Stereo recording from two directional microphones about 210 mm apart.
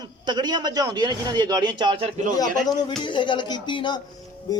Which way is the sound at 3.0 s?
25° left (ahead or behind).